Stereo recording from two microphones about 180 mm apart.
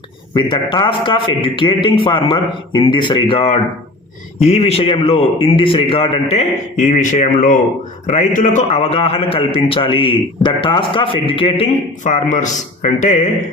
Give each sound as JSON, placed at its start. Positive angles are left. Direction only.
{"t": 0.3, "sound": "a man's voice", "side_deg": 25}
{"t": 12.0, "sound": "a man's voice", "side_deg": 40}